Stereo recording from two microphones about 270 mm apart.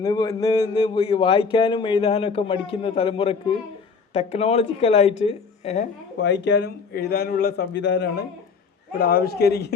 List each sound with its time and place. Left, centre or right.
0.0 s a man's voice: centre
6.1 s a man's voice: left